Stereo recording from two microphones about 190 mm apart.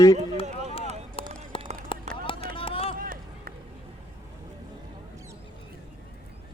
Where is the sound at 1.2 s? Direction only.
30° left (ahead or behind).